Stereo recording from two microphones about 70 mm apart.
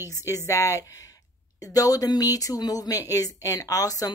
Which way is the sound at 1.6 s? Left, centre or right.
Left.